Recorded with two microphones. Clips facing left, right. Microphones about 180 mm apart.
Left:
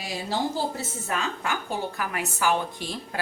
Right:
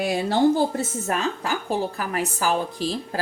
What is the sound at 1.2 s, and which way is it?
A woman's voice, 35° right (ahead or behind).